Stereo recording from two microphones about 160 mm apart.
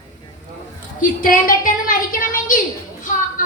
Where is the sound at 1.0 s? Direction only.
60° left (ahead or behind).